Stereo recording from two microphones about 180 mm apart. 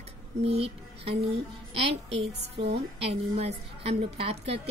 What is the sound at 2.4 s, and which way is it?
Speech, 70° right (ahead or behind).